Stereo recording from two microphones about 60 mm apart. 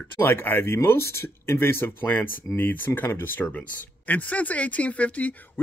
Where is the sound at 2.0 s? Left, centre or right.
Left.